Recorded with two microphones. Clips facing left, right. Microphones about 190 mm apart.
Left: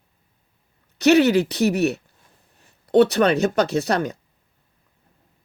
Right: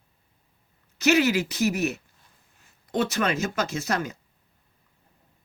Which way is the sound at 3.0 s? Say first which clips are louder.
Left 9 dB; 35° left (ahead or behind).